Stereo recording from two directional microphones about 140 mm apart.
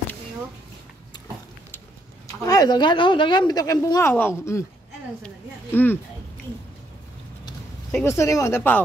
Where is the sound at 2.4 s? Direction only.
25° left (ahead or behind).